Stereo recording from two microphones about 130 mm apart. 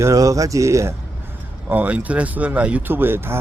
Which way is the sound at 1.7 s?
10° right (ahead or behind).